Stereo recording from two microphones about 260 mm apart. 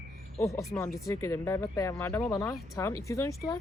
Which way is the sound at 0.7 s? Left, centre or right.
Centre.